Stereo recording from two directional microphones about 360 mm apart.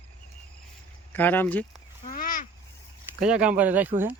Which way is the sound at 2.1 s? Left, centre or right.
Left.